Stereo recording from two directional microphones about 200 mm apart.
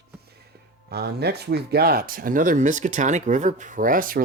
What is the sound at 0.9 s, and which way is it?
Speech, 55° right (ahead or behind).